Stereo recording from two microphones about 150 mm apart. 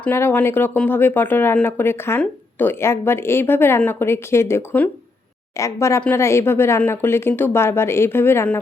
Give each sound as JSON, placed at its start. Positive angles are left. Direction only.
{"t": 0.0, "sound": "speech", "side_deg": 15}